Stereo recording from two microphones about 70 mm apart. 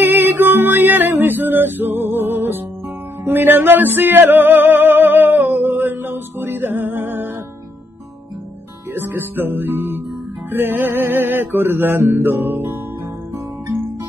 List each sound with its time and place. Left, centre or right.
0.0 s music: right
8.9 s music: right